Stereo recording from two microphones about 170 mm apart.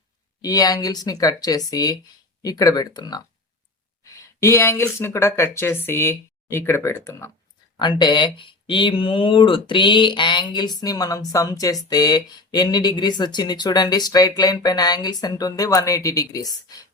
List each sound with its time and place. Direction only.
0.4 s speech: 20° left (ahead or behind)
7.8 s speech: 25° left (ahead or behind)